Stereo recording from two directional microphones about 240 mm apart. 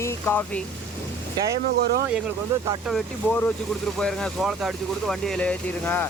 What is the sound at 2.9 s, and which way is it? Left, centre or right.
Speech, centre.